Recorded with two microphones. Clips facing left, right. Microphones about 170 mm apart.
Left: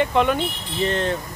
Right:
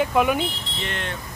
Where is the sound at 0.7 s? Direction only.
35° left (ahead or behind).